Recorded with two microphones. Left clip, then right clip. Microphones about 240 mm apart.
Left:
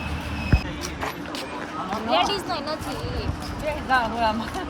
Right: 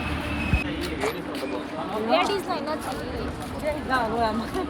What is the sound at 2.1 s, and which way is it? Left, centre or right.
Speech, left.